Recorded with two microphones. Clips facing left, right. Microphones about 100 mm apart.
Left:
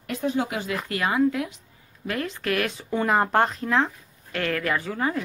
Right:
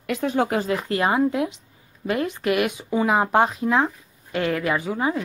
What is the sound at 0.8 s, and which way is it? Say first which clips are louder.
Speech: left 1 dB; 30° right (ahead or behind).